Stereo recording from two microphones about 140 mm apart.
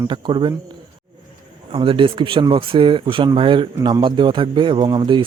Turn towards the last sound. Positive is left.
turn(degrees=-35)  # may be behind; listen again after turning